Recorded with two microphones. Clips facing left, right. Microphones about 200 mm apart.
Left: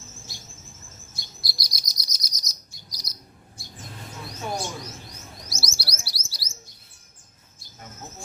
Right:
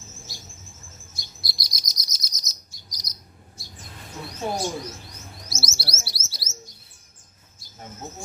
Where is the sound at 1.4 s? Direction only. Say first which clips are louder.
Even; 25° right (ahead or behind).